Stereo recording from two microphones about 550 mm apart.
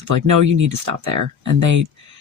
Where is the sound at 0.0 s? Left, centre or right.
Right.